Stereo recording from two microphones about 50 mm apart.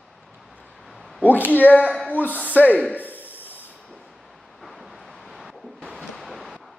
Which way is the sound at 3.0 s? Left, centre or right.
Left.